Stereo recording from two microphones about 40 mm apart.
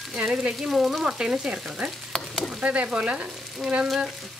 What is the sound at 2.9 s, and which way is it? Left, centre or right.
Frying, right.